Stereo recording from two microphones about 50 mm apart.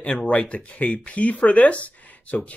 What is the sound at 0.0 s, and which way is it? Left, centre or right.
Speech, left.